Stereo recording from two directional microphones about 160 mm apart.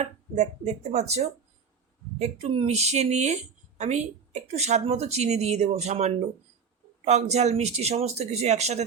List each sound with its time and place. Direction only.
0.0 s speech: 45° right (ahead or behind)